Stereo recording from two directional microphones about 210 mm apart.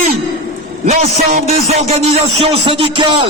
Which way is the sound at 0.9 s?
30° right (ahead or behind).